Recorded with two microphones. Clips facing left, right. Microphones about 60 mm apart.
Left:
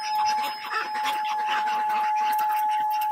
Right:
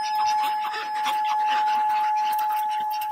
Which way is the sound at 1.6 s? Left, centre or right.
Left.